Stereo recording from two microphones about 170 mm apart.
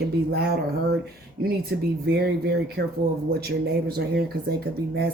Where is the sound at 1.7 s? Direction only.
85° right.